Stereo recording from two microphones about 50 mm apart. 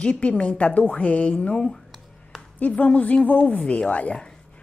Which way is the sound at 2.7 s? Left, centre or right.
Left.